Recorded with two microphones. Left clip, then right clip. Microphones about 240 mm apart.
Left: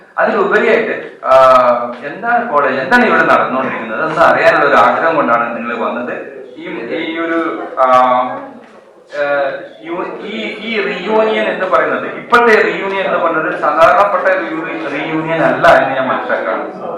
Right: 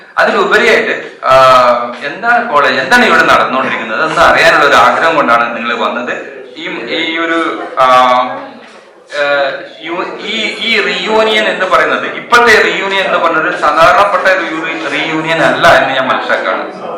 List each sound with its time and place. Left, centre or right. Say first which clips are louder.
0.2 s a man's voice: right 3 dB; centre